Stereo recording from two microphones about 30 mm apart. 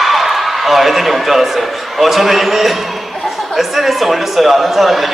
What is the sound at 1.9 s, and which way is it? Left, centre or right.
Speech, centre.